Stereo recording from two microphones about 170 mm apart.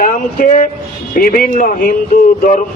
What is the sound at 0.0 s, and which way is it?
A man's voice, 50° left (ahead or behind).